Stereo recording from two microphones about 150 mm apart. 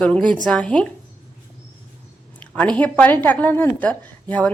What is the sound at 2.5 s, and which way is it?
A woman's voice, 10° left (ahead or behind).